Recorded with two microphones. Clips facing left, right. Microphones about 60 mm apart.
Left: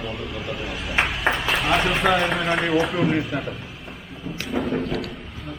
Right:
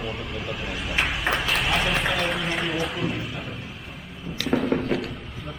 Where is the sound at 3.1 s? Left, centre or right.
Left.